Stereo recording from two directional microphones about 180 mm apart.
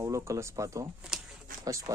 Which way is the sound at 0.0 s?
15° right (ahead or behind).